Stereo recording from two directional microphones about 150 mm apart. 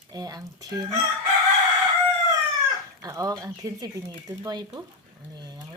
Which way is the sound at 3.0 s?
20° right (ahead or behind).